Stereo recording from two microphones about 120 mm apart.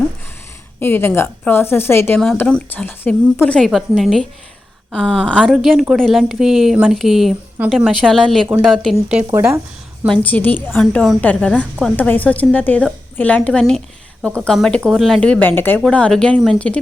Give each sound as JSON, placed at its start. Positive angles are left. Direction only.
{"t": 0.8, "sound": "a woman's voice", "side_deg": 20}
{"t": 2.1, "sound": "a woman's voice", "side_deg": 5}
{"t": 3.6, "sound": "a woman's voice", "side_deg": 0}
{"t": 10.1, "sound": "a woman's voice", "side_deg": 15}
{"t": 10.7, "sound": "a woman's voice", "side_deg": 5}